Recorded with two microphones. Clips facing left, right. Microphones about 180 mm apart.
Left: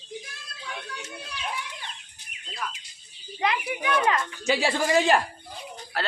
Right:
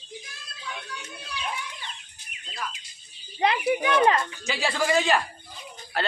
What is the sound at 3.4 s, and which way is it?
Speech, 30° right (ahead or behind).